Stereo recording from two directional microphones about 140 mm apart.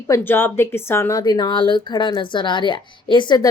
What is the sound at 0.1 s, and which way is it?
Speech, 15° left (ahead or behind).